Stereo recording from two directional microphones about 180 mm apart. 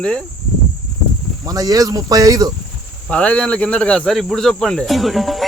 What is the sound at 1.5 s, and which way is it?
Speech, 20° right (ahead or behind).